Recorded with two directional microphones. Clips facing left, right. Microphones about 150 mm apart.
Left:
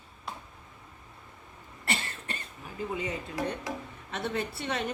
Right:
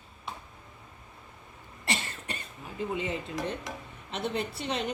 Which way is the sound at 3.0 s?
25° right (ahead or behind).